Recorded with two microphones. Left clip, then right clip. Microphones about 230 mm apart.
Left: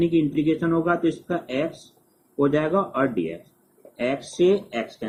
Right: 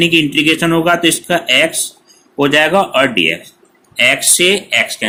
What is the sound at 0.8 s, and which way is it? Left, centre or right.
Speech, right.